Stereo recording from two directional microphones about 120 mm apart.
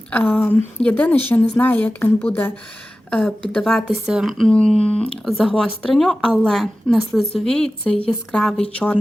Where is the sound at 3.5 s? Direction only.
5° left (ahead or behind).